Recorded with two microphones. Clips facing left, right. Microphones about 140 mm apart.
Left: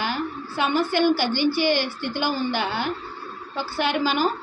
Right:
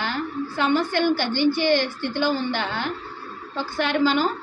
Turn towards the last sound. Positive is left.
turn(degrees=5)  # may be behind; listen again after turning